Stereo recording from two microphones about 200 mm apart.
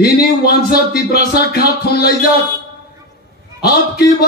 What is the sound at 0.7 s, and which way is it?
A man's voice, 50° left (ahead or behind).